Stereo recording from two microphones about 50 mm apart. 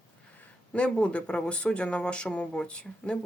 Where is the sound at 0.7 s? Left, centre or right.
Left.